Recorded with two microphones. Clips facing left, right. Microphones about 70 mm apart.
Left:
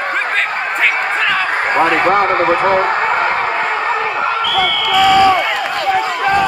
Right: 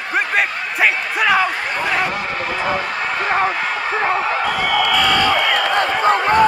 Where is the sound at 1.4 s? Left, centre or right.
Left.